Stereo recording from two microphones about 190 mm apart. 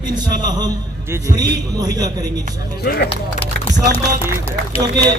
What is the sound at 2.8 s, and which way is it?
Speech, 55° left (ahead or behind).